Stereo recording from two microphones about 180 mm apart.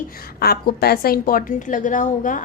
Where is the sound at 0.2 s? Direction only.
60° left (ahead or behind).